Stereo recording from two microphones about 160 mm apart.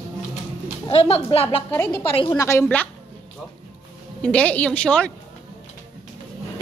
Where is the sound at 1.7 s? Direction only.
15° left (ahead or behind).